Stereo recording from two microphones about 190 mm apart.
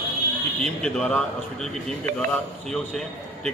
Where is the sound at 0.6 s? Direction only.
5° left (ahead or behind).